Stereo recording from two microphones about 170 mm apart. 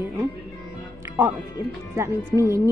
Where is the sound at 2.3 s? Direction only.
10° right (ahead or behind).